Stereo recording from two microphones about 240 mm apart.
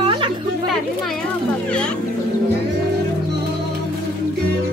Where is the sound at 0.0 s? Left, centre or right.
Right.